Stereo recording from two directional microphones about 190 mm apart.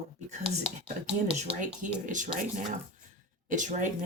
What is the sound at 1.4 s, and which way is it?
Speech, 45° right (ahead or behind).